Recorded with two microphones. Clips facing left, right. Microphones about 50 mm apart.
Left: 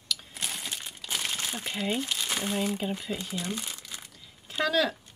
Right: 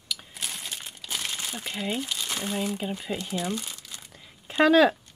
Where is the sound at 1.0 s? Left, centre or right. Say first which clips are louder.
Left 1 dB; centre.